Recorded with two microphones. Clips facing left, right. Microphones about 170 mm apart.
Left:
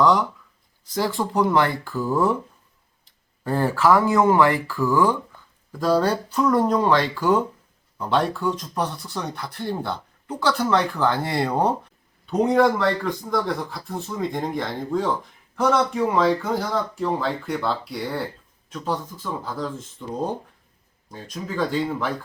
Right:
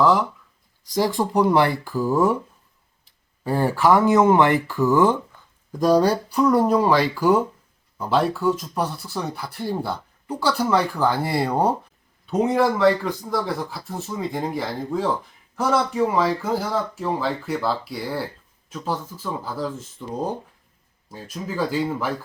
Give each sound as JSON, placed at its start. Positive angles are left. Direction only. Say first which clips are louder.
{"t": 0.0, "sound": "speech", "louder": "even", "side_deg": -5}
{"t": 0.9, "sound": "speech", "louder": "right 2 dB", "side_deg": -15}